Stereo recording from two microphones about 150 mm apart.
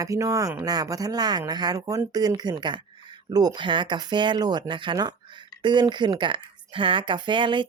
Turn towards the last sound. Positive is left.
turn(degrees=-35)  # may be behind; listen again after turning